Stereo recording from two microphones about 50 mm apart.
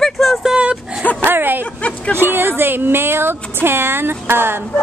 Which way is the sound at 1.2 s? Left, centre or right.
Right.